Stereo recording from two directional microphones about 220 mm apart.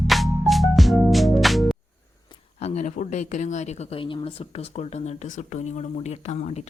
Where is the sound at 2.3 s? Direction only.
30° left (ahead or behind).